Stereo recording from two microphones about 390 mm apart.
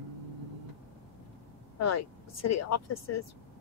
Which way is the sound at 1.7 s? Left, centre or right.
Left.